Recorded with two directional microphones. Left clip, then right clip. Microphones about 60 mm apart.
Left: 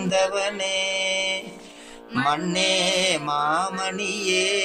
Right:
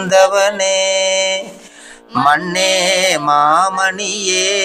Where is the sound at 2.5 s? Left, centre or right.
Right.